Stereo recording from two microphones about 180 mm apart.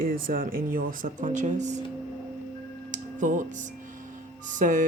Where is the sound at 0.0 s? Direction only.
55° right (ahead or behind).